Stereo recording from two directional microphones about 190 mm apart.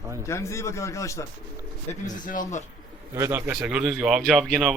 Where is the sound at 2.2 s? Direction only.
45° left (ahead or behind).